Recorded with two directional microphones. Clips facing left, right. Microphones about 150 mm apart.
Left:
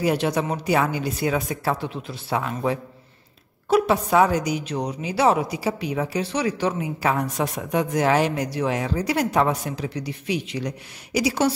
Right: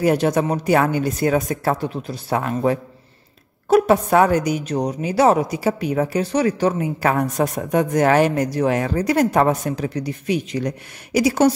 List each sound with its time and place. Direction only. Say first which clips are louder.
0.0 s a woman's voice: right 5 dB; 45° right (ahead or behind)